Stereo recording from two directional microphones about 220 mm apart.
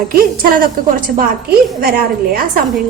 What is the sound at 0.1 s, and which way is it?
A woman's voice, 40° right (ahead or behind).